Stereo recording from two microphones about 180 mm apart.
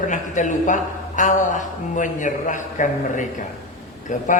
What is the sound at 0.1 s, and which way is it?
A man's voice, 45° left (ahead or behind).